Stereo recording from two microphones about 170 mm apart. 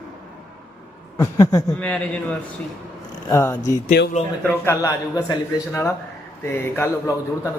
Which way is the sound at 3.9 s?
80° left.